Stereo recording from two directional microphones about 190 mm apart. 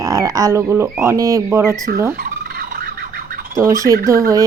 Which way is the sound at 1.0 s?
15° right (ahead or behind).